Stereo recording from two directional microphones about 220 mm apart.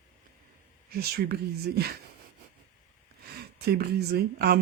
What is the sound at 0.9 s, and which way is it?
Speech, 45° right (ahead or behind).